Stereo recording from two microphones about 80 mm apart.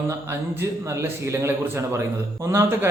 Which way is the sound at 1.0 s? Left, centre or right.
Right.